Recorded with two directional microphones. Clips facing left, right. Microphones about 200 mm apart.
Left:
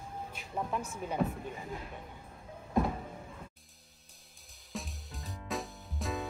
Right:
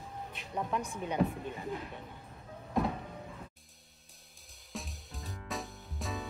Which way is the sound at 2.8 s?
Centre (ahead or behind).